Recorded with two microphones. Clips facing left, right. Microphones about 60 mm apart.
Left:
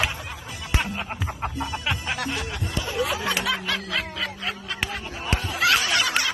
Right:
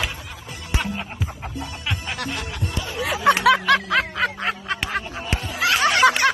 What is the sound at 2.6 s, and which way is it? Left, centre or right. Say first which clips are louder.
Snicker: left 1 dB; right.